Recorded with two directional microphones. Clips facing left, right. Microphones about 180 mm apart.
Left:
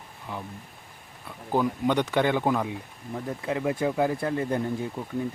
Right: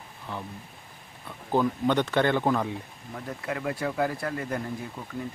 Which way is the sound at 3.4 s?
20° left (ahead or behind).